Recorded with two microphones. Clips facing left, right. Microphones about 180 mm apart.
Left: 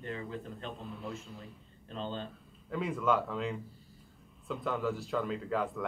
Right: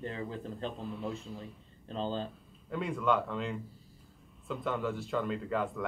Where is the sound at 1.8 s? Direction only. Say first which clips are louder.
Right 4 dB; 30° right (ahead or behind).